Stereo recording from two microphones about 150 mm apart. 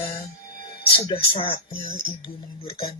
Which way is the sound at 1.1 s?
35° left (ahead or behind).